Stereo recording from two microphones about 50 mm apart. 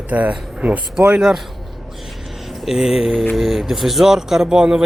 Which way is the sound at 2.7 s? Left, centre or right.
Centre.